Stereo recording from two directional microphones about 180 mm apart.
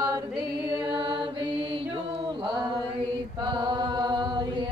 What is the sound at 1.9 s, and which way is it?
Chant, 30° right (ahead or behind).